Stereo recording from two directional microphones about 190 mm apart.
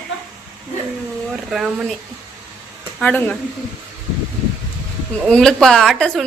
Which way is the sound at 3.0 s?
10° left (ahead or behind).